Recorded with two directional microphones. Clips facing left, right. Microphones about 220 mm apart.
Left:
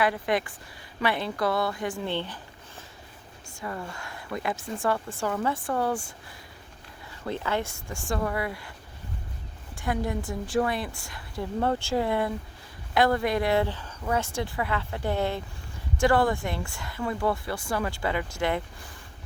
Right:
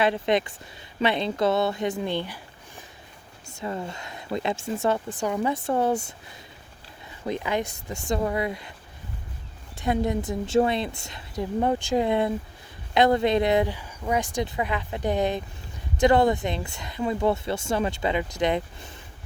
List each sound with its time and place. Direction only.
0.0 s speech: 25° right (ahead or behind)
7.3 s speech: 15° right (ahead or behind)
9.7 s speech: 20° right (ahead or behind)